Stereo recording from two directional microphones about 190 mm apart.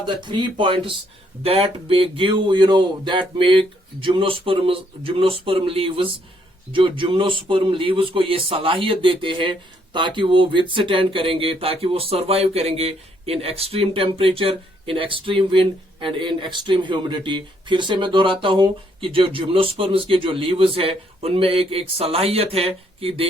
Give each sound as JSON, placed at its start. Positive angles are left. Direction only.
{"t": 0.0, "sound": "speech", "side_deg": -25}